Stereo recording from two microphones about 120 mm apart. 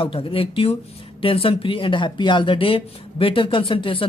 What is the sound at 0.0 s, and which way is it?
Speech, 50° left (ahead or behind).